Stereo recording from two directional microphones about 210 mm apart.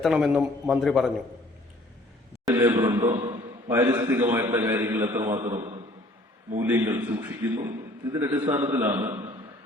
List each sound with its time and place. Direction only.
0.0 s a man's voice: centre (ahead or behind)
2.4 s a man's voice: 15° right (ahead or behind)
5.5 s a sound: 30° right (ahead or behind)
6.6 s a man's voice: 10° right (ahead or behind)